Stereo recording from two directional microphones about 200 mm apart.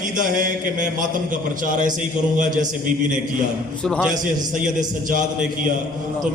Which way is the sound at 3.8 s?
5° left (ahead or behind).